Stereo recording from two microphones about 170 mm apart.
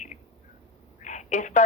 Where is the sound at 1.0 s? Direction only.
45° left (ahead or behind).